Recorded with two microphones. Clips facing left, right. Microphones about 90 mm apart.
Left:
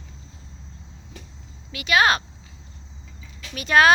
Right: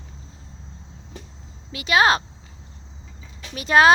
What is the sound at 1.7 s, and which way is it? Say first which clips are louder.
Speech: right 1 dB; 25° right (ahead or behind).